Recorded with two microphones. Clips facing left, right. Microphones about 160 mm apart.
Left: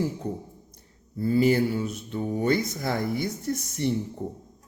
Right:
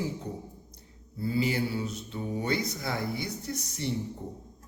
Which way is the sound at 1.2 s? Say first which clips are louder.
Left 7 dB; 50° left (ahead or behind).